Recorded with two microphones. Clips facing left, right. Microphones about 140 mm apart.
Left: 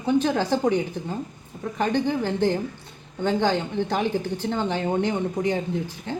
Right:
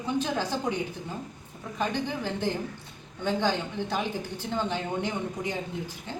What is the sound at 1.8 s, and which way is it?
A woman's voice, 55° left (ahead or behind).